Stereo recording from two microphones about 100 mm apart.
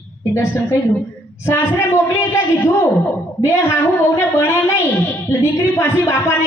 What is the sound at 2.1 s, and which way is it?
A woman's voice, 25° left (ahead or behind).